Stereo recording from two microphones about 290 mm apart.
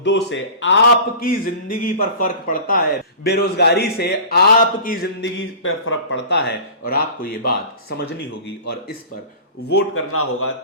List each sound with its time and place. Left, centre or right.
0.0 s speech: left
5.6 s speech: left
9.6 s a man's voice: left